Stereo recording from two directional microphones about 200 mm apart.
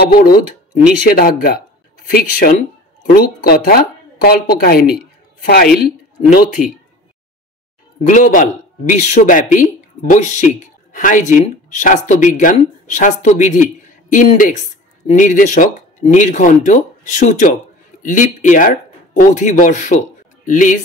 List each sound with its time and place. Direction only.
0.0 s speech: 45° left (ahead or behind)
8.1 s speech: 40° left (ahead or behind)